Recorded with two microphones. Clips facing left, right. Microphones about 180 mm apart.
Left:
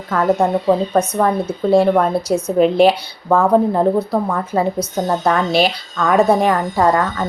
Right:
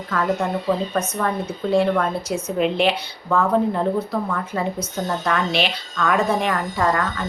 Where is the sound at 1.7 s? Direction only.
35° left (ahead or behind).